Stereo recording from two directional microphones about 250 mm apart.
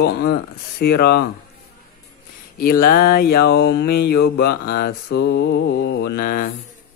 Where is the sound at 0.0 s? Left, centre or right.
Left.